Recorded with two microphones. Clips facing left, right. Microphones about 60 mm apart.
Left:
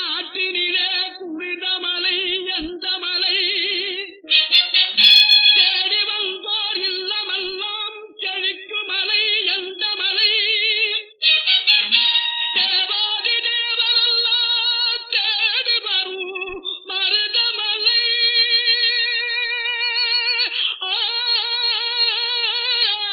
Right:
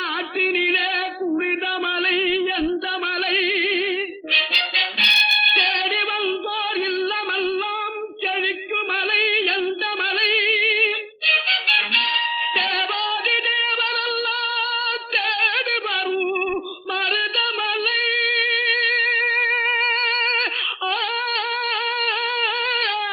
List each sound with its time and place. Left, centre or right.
0.6 s female singing: right
2.0 s a sound: right
4.3 s music: right
10.2 s music: right
13.7 s singing: right
17.1 s singing: right
20.0 s music: right
21.2 s humming: right